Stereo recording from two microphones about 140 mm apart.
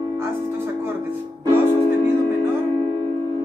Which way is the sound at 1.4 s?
20° right (ahead or behind).